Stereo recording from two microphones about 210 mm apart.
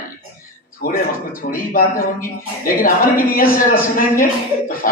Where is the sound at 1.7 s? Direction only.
45° left (ahead or behind).